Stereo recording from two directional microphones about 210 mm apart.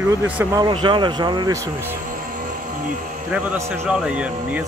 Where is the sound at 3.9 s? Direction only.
5° right (ahead or behind).